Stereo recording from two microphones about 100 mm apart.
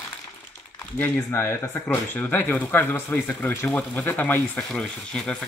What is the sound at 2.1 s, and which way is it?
Speech, 15° left (ahead or behind).